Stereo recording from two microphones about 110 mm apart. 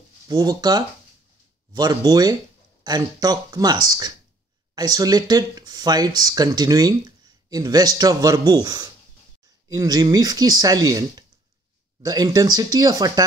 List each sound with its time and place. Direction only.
0.3 s speech: 35° right (ahead or behind)